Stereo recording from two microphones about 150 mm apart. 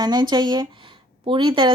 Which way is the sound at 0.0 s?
30° right (ahead or behind).